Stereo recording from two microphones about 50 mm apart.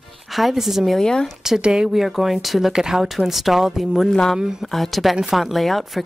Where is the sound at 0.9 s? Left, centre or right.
Centre.